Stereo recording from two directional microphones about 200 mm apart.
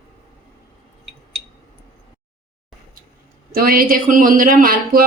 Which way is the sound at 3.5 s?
45° right (ahead or behind).